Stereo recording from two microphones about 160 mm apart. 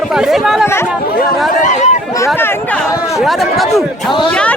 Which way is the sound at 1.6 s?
50° left (ahead or behind).